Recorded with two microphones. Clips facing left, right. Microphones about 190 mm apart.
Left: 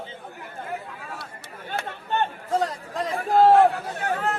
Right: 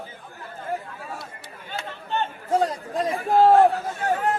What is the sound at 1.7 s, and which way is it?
Chatter, 60° left (ahead or behind).